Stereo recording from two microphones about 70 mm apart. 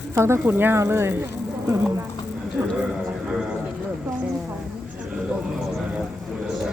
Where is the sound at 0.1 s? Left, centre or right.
Right.